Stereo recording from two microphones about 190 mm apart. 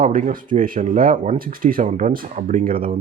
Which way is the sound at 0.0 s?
45° right (ahead or behind).